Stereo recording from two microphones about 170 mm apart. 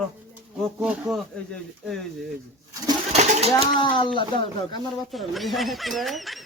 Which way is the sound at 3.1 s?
40° right (ahead or behind).